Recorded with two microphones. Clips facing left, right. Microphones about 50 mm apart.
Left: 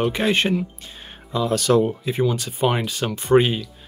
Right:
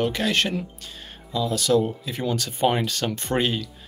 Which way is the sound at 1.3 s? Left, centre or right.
Left.